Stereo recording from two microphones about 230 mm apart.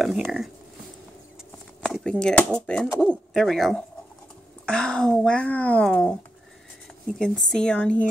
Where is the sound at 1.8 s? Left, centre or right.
Centre.